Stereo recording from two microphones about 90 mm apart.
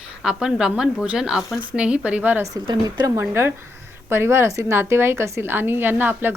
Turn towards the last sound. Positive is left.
turn(degrees=-25)  # may be behind; listen again after turning